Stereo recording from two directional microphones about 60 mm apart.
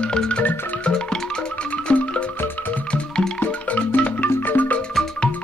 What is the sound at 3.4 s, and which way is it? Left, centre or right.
Music, left.